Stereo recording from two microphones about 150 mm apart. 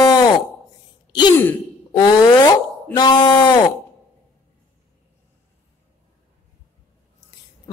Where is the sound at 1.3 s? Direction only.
15° left (ahead or behind).